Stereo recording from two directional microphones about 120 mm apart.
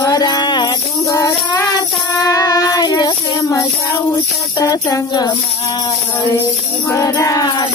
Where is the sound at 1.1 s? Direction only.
30° left (ahead or behind).